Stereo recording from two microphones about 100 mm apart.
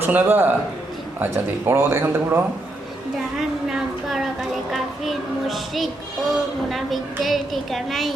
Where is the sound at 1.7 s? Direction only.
25° right (ahead or behind).